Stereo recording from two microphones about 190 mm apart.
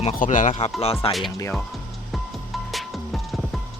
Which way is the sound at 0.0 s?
35° left (ahead or behind).